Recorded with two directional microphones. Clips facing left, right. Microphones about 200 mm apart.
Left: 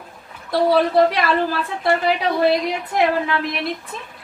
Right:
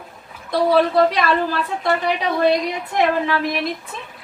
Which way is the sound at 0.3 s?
Centre (ahead or behind).